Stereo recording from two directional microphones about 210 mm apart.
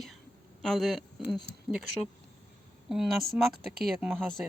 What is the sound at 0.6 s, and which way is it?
Speech, centre (ahead or behind).